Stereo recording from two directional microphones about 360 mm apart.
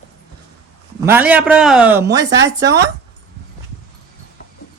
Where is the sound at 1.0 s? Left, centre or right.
Centre.